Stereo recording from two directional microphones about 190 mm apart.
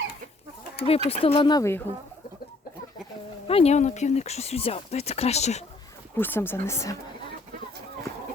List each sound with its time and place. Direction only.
0.9 s speech: 30° left (ahead or behind)
3.4 s speech: 30° left (ahead or behind)
6.1 s speech: 10° left (ahead or behind)